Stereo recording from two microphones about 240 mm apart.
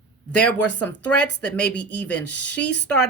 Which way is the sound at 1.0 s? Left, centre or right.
Centre.